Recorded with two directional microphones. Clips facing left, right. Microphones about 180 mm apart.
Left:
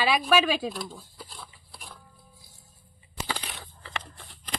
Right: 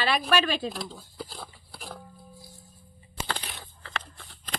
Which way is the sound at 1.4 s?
65° right (ahead or behind).